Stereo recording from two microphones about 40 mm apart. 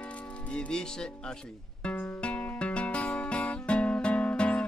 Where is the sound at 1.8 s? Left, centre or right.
Left.